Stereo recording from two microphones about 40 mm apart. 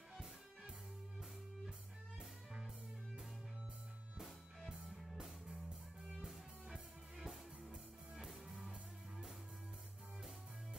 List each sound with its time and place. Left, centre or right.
2.1 s music: right
4.6 s music: centre